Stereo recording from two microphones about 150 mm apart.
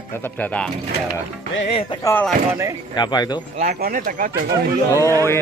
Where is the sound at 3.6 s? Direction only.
70° right (ahead or behind).